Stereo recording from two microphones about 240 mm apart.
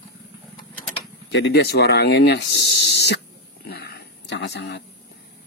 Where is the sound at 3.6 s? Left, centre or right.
Left.